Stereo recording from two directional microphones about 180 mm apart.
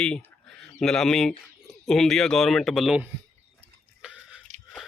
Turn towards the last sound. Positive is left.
turn(degrees=-5)  # may be behind; listen again after turning